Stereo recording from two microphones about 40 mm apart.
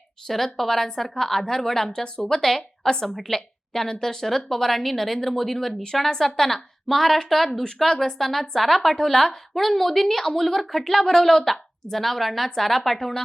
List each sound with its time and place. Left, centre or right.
0.3 s a woman's voice: centre